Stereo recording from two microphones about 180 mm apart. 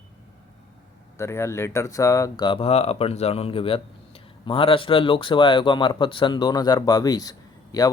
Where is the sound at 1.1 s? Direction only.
15° left (ahead or behind).